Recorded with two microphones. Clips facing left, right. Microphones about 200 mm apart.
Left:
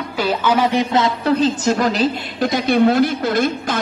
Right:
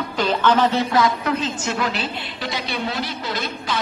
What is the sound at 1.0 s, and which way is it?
A woman's voice, 35° left (ahead or behind).